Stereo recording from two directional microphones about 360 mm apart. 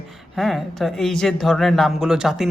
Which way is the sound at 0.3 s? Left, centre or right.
Centre.